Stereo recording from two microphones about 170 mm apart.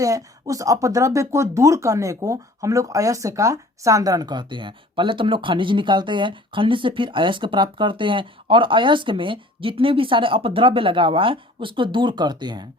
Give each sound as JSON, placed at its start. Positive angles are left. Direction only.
{"t": 0.0, "sound": "speech", "side_deg": -20}